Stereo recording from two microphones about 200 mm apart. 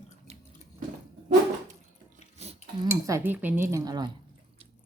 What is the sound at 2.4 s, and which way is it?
Cutlery, 30° right (ahead or behind).